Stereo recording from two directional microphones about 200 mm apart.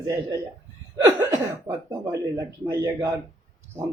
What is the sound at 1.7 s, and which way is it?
A man's voice, 10° right (ahead or behind).